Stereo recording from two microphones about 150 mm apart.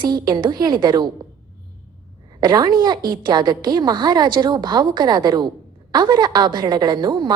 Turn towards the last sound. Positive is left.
turn(degrees=-30)  # may be behind; listen again after turning